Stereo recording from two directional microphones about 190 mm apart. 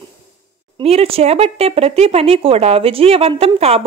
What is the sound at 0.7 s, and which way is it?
Speech, 30° right (ahead or behind).